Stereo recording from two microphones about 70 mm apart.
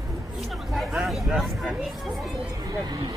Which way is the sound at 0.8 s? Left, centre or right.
Centre.